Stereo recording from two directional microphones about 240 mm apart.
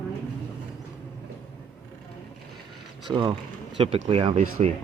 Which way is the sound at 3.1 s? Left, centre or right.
Centre.